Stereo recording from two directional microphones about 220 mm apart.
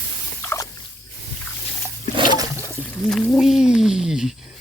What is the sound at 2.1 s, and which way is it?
Water, 20° right (ahead or behind).